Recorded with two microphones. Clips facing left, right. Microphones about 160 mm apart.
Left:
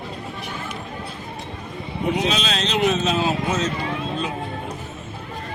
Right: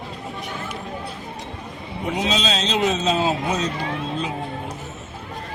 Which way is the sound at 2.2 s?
20° right (ahead or behind).